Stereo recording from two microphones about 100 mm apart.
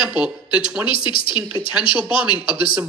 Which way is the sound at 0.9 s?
55° left (ahead or behind).